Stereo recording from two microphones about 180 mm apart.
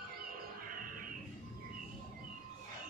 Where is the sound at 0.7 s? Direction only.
50° right (ahead or behind).